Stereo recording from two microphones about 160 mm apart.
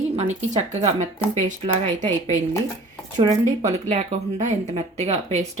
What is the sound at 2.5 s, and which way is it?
Dishes, 20° left (ahead or behind).